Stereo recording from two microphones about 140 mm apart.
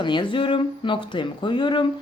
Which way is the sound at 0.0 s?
35° left (ahead or behind).